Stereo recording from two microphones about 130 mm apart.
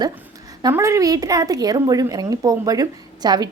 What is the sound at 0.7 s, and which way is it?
A woman's voice, 20° right (ahead or behind).